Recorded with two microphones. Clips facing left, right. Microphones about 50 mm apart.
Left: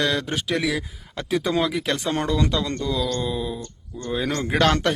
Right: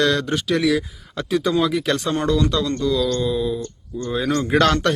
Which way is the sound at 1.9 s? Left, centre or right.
Left.